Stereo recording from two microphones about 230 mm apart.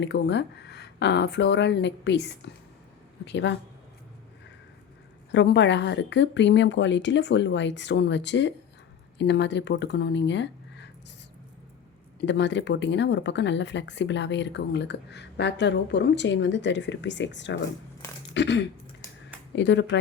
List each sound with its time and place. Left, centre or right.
0.0 s speech: left
5.3 s speech: left
12.2 s speech: left